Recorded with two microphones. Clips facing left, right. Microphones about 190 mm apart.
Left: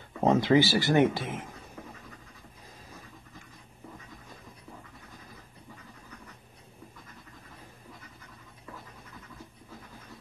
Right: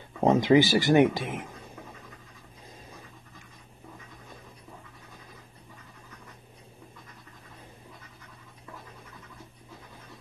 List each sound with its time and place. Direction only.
0.2 s speech: 15° right (ahead or behind)